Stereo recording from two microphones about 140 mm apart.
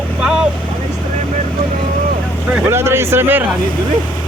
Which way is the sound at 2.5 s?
15° right (ahead or behind).